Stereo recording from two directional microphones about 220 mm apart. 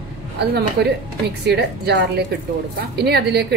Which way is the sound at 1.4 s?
45° right (ahead or behind).